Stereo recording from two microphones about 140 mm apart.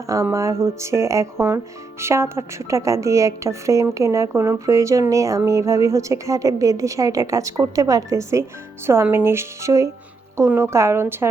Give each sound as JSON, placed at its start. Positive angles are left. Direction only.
{"t": 0.1, "sound": "speech", "side_deg": -20}